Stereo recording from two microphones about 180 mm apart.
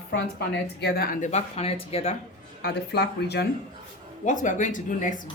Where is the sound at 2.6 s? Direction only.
65° left (ahead or behind).